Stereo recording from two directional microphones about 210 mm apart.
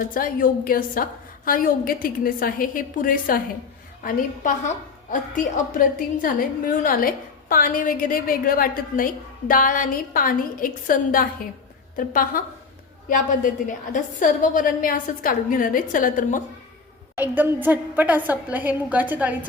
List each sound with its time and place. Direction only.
0.0 s a woman's voice: 40° left (ahead or behind)
5.1 s a woman's voice: 40° left (ahead or behind)
17.2 s a woman's voice: 10° right (ahead or behind)